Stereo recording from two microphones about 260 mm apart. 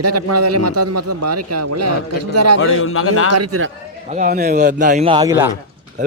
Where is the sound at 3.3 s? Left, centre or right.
Right.